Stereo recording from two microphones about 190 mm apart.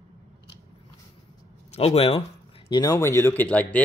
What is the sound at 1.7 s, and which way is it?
Speech, 30° left (ahead or behind).